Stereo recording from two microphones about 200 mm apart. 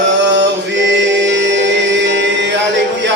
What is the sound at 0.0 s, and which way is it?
Chant, 60° right (ahead or behind).